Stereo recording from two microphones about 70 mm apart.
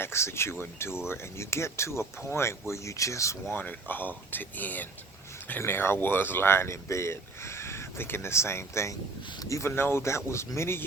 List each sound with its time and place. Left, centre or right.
0.0 s speech: left
3.5 s speech: left
9.6 s speech: left